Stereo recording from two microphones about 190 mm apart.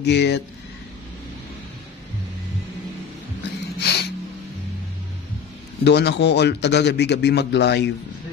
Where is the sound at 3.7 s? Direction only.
60° left (ahead or behind).